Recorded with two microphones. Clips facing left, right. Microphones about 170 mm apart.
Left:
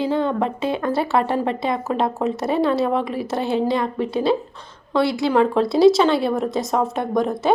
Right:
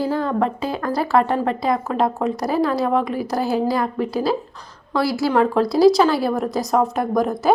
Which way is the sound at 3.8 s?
Centre (ahead or behind).